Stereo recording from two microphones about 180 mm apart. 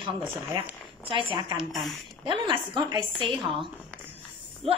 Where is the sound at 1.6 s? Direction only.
Centre (ahead or behind).